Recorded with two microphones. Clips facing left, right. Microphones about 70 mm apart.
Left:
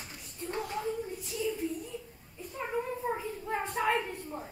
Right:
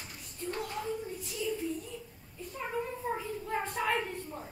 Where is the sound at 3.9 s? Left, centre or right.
Centre.